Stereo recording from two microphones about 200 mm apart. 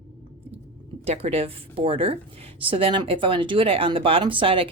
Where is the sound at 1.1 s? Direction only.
30° right (ahead or behind).